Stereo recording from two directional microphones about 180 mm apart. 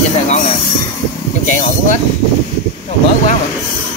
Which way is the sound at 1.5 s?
40° left (ahead or behind).